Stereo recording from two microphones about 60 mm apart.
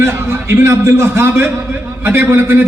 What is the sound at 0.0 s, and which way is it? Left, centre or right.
A man's voice, right.